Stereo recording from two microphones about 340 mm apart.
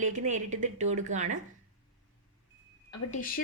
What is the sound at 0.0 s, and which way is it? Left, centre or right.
A woman's voice, right.